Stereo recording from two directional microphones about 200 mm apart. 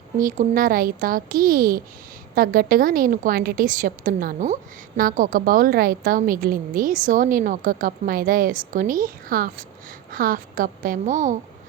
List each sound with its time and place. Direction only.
0.2 s a woman's voice: 45° right (ahead or behind)